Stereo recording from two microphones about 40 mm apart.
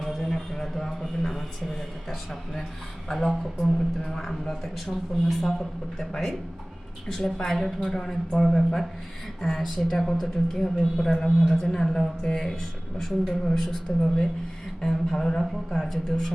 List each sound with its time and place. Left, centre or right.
0.2 s a sound: centre
3.1 s a woman's voice: centre
7.5 s a woman's voice: centre
13.0 s a woman's voice: centre